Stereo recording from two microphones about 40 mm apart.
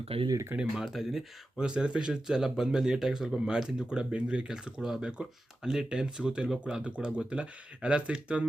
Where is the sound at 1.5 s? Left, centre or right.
Right.